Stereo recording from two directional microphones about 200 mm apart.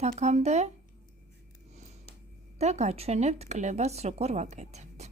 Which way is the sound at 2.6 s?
35° right (ahead or behind).